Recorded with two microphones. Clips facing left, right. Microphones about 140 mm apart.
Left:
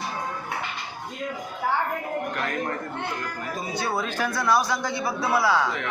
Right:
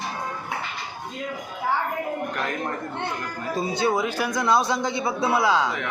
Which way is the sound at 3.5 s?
25° right (ahead or behind).